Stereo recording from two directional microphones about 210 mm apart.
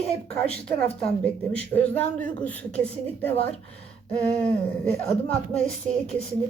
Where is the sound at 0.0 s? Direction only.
30° left (ahead or behind).